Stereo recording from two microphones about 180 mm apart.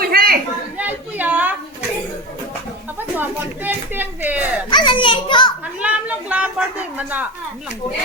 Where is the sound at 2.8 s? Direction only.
10° right (ahead or behind).